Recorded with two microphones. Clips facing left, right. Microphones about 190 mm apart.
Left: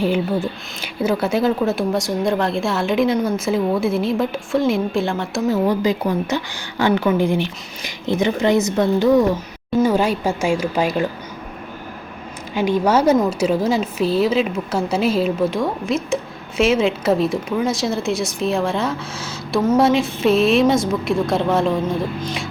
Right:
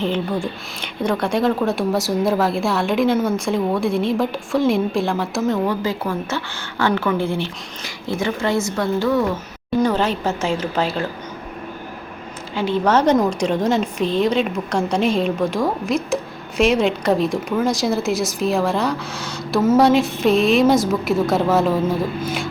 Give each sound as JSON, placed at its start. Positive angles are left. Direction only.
{"t": 0.0, "sound": "speech", "side_deg": 5}
{"t": 5.6, "sound": "a woman's voice", "side_deg": 15}
{"t": 12.5, "sound": "speech", "side_deg": 15}